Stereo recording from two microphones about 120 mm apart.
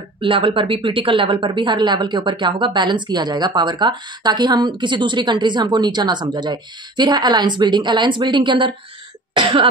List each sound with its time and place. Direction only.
0.2 s speech: 45° right (ahead or behind)